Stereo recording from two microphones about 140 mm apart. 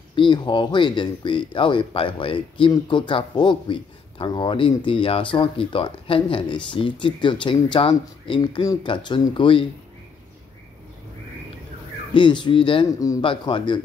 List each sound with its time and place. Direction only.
0.1 s speech: 35° left (ahead or behind)
12.1 s speech: 35° left (ahead or behind)